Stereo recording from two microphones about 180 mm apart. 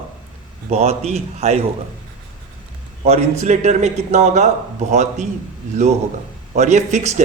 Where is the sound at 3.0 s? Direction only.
35° right (ahead or behind).